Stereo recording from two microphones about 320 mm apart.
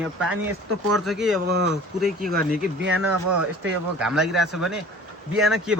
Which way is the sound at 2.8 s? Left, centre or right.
Right.